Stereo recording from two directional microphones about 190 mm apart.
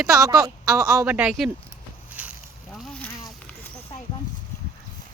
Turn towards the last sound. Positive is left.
turn(degrees=5)  # may be behind; listen again after turning